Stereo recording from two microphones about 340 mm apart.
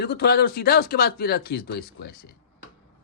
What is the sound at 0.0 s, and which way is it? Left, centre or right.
Speech, left.